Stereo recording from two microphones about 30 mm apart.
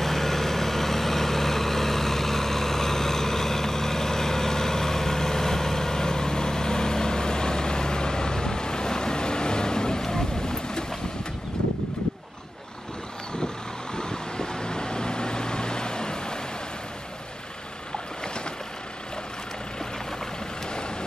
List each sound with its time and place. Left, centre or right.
0.0 s vehicle: centre
13.9 s vehicle: left